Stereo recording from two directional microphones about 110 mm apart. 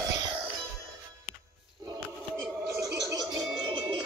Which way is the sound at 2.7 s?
30° right (ahead or behind).